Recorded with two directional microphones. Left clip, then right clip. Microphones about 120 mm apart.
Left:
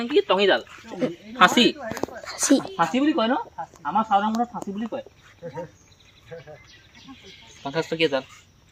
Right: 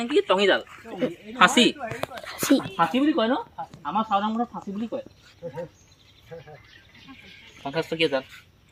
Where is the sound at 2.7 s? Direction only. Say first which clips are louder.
Even; centre (ahead or behind).